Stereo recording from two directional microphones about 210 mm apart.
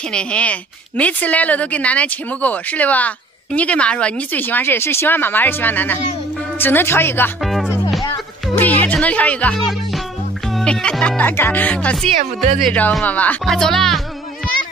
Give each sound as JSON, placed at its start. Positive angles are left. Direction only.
{"t": 0.1, "sound": "a woman's voice", "side_deg": 5}
{"t": 7.4, "sound": "music", "side_deg": 0}
{"t": 8.5, "sound": "speech", "side_deg": 10}